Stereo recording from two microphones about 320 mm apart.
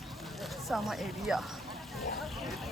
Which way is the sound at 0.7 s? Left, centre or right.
Centre.